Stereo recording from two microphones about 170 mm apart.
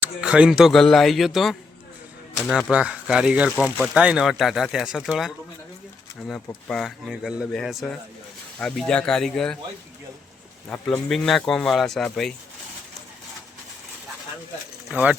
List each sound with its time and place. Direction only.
0.0 s speech: 5° right (ahead or behind)
10.7 s speech: 5° left (ahead or behind)
14.8 s speech: 5° right (ahead or behind)